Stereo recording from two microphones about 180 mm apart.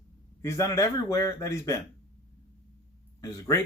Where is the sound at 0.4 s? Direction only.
15° left (ahead or behind).